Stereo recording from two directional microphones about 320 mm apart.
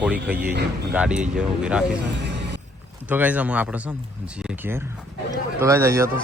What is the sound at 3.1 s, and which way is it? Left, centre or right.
Speech, centre.